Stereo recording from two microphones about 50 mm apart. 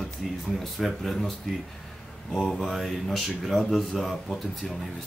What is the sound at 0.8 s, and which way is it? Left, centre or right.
Speech, centre.